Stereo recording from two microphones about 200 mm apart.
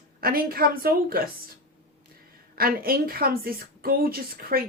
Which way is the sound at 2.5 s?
50° right (ahead or behind).